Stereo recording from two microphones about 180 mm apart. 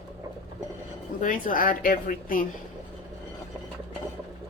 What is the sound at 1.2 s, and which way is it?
A woman's voice, 50° left (ahead or behind).